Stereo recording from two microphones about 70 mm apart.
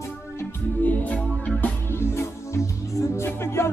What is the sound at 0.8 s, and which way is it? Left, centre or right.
Music, left.